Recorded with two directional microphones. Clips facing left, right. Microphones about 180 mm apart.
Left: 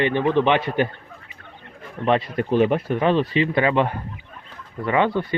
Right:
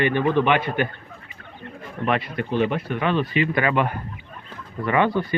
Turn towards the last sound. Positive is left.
turn(degrees=20)  # may be behind; listen again after turning